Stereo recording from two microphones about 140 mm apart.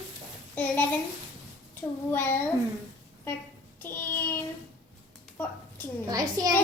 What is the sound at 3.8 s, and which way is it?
Child singing, 15° left (ahead or behind).